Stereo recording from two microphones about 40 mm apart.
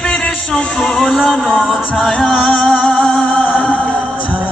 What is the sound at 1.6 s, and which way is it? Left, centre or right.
Music, centre.